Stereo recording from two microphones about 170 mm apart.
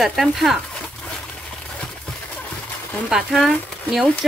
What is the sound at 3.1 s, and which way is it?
Speech, centre (ahead or behind).